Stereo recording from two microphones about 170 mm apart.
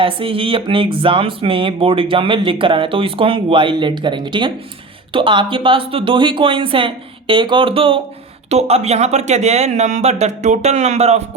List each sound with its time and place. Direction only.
0.0 s speech: 30° right (ahead or behind)